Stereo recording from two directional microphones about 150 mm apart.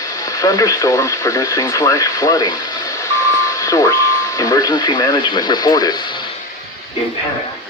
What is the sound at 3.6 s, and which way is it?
Speech, 20° left (ahead or behind).